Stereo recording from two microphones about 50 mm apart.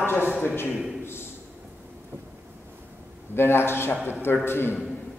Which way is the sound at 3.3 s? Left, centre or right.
Left.